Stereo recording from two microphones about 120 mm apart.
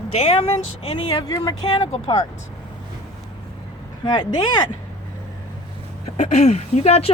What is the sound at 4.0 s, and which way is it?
Speech, 40° left (ahead or behind).